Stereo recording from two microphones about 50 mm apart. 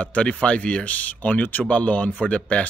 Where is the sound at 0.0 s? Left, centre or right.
Left.